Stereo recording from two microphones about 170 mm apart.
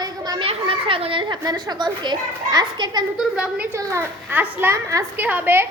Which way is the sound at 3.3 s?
5° right (ahead or behind).